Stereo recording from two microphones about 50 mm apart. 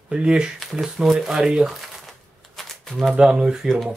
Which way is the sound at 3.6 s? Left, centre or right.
Centre.